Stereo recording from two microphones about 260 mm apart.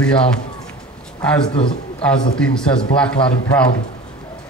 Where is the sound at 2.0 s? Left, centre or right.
Centre.